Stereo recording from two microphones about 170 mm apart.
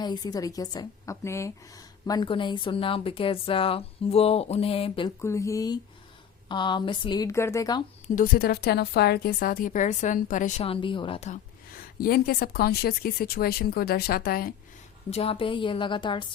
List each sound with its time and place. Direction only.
0.0 s a woman's voice: 25° left (ahead or behind)
5.0 s a woman's voice: 15° left (ahead or behind)
8.0 s a woman's voice: 55° left (ahead or behind)
10.7 s a woman's voice: 30° left (ahead or behind)
11.3 s a woman's voice: 60° left (ahead or behind)
15.1 s a woman's voice: 35° left (ahead or behind)